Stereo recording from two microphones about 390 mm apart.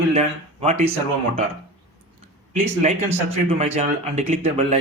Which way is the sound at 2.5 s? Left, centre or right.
Centre.